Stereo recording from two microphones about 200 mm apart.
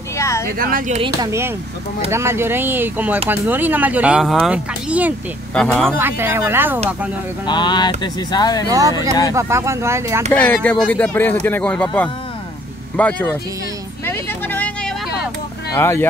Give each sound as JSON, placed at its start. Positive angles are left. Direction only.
{"t": 0.2, "sound": "a sound", "side_deg": 15}
{"t": 0.5, "sound": "speech", "side_deg": -45}
{"t": 0.9, "sound": "speech", "side_deg": -25}
{"t": 2.0, "sound": "speech", "side_deg": -15}
{"t": 5.9, "sound": "speech", "side_deg": -10}
{"t": 7.4, "sound": "speech", "side_deg": 20}
{"t": 8.6, "sound": "speech", "side_deg": -15}
{"t": 10.3, "sound": "speech", "side_deg": 10}
{"t": 14.0, "sound": "vehicle", "side_deg": 10}
{"t": 15.7, "sound": "speech", "side_deg": 10}